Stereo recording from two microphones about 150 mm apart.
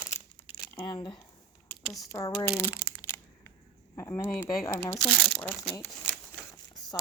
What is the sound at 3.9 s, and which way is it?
Speech, 15° left (ahead or behind).